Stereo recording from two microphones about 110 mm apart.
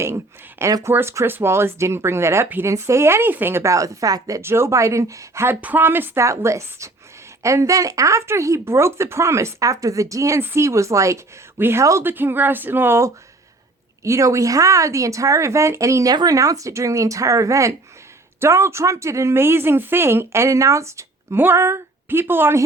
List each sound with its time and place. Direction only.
0.6 s speech: 30° right (ahead or behind)